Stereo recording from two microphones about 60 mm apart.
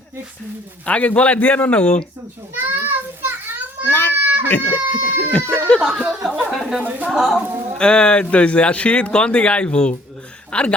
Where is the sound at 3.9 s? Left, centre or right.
Left.